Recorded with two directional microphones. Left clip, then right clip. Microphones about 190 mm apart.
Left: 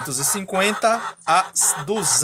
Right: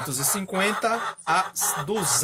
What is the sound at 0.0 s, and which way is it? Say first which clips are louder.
Speech: left 3 dB; 25° left (ahead or behind).